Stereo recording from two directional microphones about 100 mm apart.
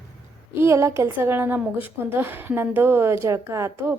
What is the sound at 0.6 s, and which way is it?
A woman's voice, 30° right (ahead or behind).